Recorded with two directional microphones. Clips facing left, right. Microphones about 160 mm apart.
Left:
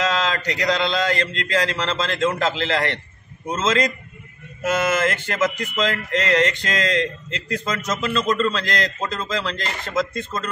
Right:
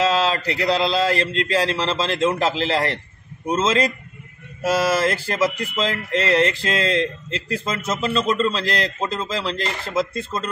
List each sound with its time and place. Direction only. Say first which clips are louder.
0.0 s speech: right 3 dB; 30° right (ahead or behind)